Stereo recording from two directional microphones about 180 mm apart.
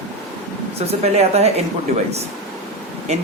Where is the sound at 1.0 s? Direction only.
35° right (ahead or behind).